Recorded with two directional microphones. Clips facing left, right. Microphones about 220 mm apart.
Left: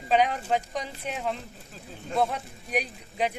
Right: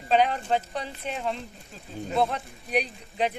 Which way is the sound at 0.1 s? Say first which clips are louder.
Right 1 dB; 10° left (ahead or behind).